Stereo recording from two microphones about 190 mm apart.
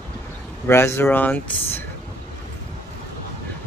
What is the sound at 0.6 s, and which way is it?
Speech, 15° left (ahead or behind).